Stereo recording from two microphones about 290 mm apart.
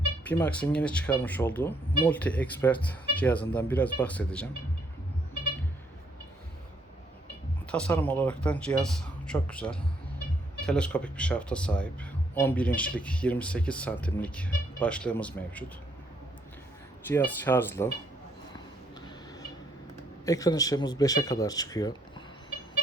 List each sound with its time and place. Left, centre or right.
0.3 s speech: centre
7.7 s speech: centre
17.1 s speech: centre
20.2 s speech: centre